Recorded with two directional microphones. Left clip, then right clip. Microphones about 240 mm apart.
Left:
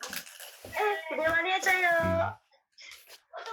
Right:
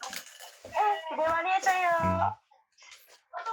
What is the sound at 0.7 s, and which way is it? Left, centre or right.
A child's voice, centre.